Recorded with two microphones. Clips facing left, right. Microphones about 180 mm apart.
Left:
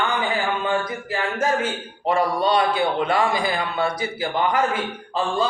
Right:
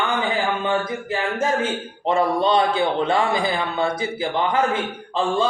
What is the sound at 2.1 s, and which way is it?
A man's voice, 25° right (ahead or behind).